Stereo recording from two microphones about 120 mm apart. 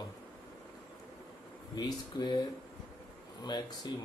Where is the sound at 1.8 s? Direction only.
35° left (ahead or behind).